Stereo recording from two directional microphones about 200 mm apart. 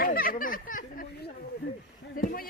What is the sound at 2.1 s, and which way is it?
Speech, 45° left (ahead or behind).